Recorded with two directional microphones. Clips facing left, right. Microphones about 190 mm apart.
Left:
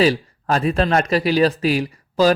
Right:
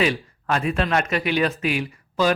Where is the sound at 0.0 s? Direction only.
35° left (ahead or behind).